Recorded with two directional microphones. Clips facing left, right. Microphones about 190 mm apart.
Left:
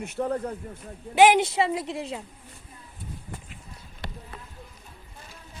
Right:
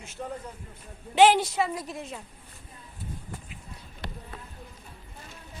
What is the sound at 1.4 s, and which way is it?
Speech, 25° left (ahead or behind).